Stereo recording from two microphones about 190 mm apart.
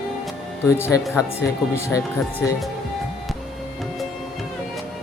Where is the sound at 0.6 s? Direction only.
15° left (ahead or behind).